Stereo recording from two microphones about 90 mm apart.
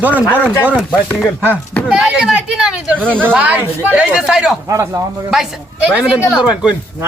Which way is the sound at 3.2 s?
15° right (ahead or behind).